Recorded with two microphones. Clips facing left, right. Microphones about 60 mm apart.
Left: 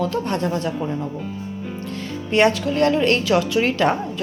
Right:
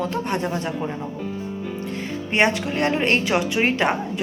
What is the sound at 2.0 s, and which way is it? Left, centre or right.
A woman's voice, right.